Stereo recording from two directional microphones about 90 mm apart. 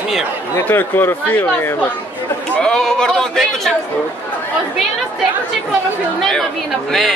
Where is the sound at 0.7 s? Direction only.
25° left (ahead or behind).